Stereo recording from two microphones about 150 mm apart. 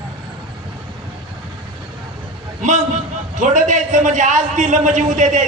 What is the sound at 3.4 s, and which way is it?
A man's voice, 55° right (ahead or behind).